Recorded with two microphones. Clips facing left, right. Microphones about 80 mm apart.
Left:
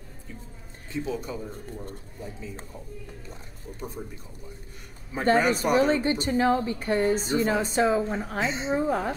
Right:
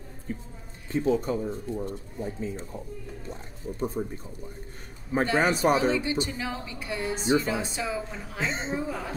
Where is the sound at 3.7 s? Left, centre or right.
Right.